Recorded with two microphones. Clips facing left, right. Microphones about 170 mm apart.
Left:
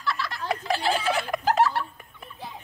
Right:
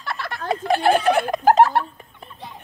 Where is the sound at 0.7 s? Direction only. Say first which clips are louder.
Right 9 dB; 55° right (ahead or behind).